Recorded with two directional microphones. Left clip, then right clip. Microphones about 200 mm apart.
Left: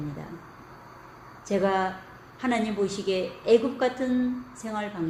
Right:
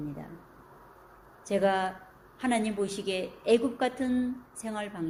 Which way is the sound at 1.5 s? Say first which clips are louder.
Left 2 dB; 45° right (ahead or behind).